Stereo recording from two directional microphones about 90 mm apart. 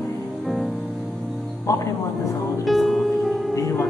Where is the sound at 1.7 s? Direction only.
35° left (ahead or behind).